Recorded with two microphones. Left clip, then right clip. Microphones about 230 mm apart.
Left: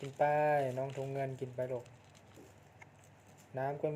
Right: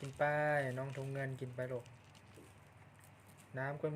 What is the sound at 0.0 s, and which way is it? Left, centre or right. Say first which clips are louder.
Speech: left 4 dB; centre.